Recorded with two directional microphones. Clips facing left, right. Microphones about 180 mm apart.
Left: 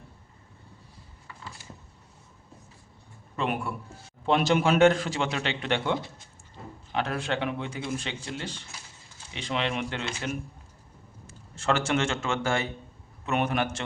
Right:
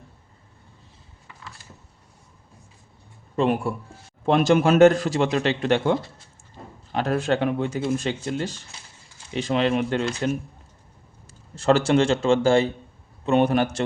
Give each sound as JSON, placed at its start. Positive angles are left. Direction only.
{"t": 3.3, "sound": "a man's voice", "side_deg": -35}
{"t": 4.3, "sound": "a man's voice", "side_deg": -45}
{"t": 11.3, "sound": "a man's voice", "side_deg": -35}